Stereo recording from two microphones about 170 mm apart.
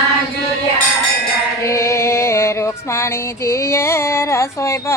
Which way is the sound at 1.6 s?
20° left (ahead or behind).